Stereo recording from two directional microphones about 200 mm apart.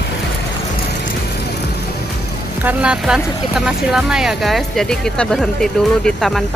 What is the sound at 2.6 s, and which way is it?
Speech, 5° right (ahead or behind).